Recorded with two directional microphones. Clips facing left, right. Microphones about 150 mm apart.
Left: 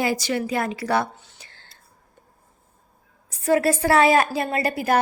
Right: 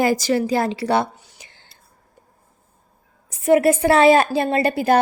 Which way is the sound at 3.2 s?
20° right (ahead or behind).